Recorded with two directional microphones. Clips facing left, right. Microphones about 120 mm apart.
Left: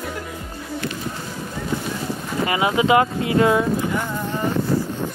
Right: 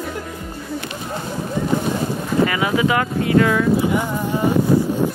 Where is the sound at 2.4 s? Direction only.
25° left (ahead or behind).